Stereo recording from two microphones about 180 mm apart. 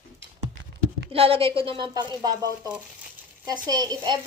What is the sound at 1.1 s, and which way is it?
Speech, 30° right (ahead or behind).